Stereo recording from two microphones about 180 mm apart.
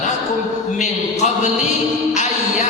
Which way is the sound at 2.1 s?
40° left (ahead or behind).